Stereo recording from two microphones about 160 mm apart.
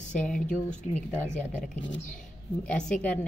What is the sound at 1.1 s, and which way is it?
Speech, 10° left (ahead or behind).